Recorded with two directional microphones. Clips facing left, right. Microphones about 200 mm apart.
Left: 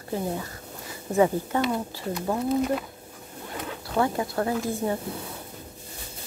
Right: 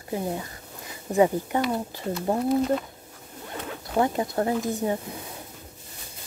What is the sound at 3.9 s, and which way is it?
Speech, 20° right (ahead or behind).